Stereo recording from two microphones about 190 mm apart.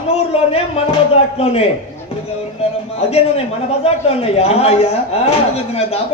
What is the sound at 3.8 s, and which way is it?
A man's voice, 30° left (ahead or behind).